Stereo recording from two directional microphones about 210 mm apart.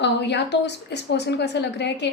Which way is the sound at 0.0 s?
55° left (ahead or behind).